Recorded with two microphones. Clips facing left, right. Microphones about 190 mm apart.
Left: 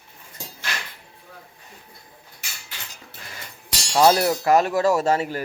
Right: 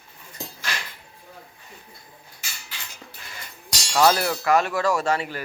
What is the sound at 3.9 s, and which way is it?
Speech, 25° left (ahead or behind).